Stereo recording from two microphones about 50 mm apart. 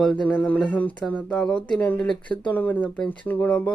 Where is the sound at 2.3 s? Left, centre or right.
Left.